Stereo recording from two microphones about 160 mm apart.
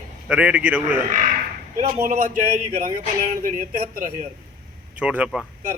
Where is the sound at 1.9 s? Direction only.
55° right (ahead or behind).